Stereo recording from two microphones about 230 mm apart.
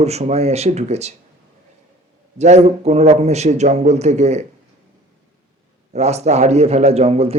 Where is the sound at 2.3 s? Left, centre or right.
Right.